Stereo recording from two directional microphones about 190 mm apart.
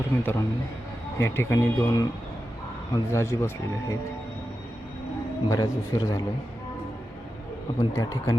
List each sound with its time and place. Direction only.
0.2 s speech: 10° left (ahead or behind)
5.5 s speech: 20° left (ahead or behind)
7.8 s speech: 15° left (ahead or behind)